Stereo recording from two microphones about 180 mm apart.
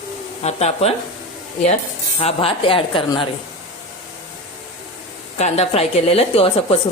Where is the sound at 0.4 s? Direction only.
35° left (ahead or behind).